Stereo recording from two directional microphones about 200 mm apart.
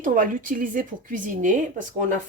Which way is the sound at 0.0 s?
45° right (ahead or behind).